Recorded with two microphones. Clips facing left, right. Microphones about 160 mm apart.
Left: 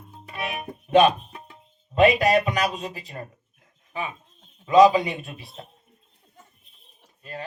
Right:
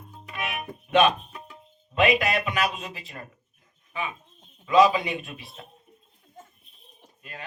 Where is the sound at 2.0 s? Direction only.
35° left (ahead or behind).